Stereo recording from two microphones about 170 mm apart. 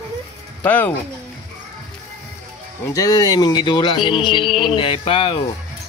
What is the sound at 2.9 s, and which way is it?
Speech, 20° left (ahead or behind).